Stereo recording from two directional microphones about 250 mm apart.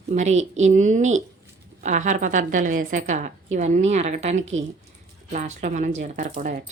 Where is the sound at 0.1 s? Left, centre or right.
Right.